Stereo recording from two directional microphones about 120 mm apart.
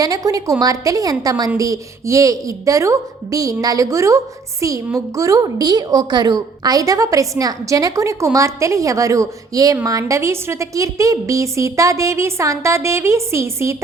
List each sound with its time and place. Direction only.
0.0 s a woman's voice: 30° right (ahead or behind)